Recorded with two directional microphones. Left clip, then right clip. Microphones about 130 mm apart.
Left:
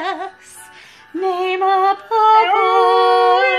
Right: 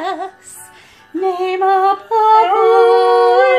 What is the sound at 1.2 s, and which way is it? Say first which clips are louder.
Female singing: right 2 dB; 20° left (ahead or behind).